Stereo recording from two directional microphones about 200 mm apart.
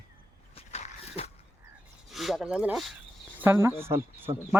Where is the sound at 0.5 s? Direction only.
30° left (ahead or behind).